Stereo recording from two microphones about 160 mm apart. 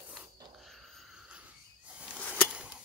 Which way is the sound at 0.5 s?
Centre (ahead or behind).